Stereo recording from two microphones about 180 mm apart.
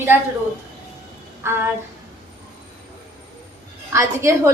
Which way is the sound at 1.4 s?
15° right (ahead or behind).